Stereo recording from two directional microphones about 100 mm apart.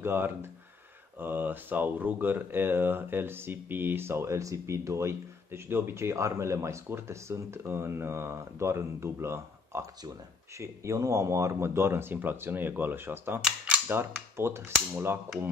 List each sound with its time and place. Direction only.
0.0 s speech: 25° right (ahead or behind)